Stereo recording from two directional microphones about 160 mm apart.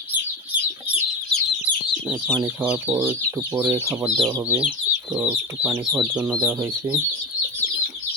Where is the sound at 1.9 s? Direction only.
5° right (ahead or behind); by 3.9 s 20° right (ahead or behind).